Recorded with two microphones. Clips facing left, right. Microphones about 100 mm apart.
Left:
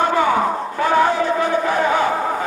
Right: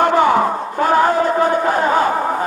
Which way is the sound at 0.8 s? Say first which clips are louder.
Right 2 dB; 40° right (ahead or behind).